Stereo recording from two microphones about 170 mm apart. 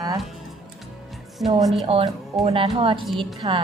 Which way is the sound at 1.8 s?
35° right (ahead or behind).